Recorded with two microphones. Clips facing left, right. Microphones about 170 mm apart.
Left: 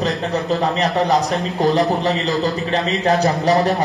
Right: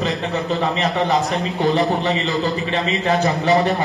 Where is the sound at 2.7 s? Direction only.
40° left (ahead or behind).